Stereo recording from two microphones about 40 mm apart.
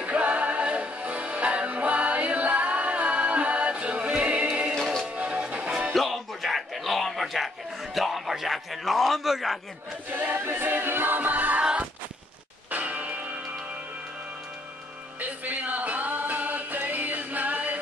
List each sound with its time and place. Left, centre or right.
0.0 s music: right
5.9 s a sound: centre
10.1 s choir: right
10.4 s a capella: right
12.7 s church bell: right
15.1 s music: right